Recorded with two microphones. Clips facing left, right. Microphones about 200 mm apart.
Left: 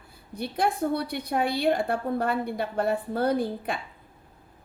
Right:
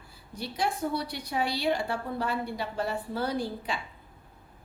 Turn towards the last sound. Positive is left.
turn(degrees=55)  # may be behind; listen again after turning